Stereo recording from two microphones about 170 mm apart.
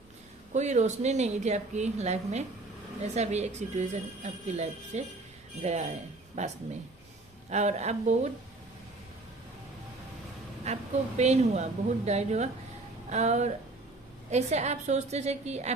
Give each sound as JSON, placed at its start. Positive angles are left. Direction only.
{"t": 0.5, "sound": "a woman's voice", "side_deg": -45}
{"t": 10.7, "sound": "a woman's voice", "side_deg": -40}